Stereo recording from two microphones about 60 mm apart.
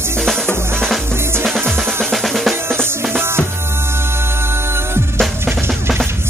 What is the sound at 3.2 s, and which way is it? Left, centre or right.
Music, right.